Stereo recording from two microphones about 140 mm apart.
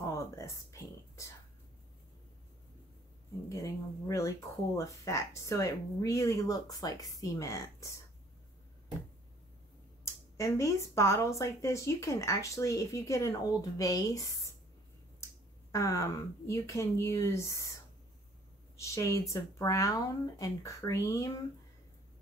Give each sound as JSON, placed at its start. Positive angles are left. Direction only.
{"t": 0.0, "sound": "a sound", "side_deg": 20}
{"t": 3.4, "sound": "speech", "side_deg": 20}
{"t": 10.3, "sound": "speech", "side_deg": 20}
{"t": 15.7, "sound": "speech", "side_deg": 20}
{"t": 18.8, "sound": "speech", "side_deg": 20}